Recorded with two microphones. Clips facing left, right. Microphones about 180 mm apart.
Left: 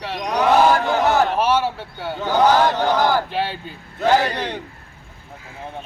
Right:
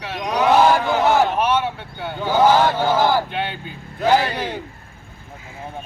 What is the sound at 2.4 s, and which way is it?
Chant, 10° right (ahead or behind).